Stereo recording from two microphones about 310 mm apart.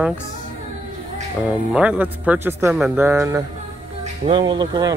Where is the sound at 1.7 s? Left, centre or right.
Centre.